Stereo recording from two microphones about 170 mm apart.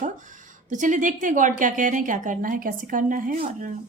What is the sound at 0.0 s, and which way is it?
Speech, 50° right (ahead or behind).